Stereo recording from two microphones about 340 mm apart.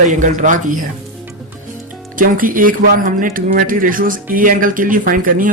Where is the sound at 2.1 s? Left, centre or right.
Right.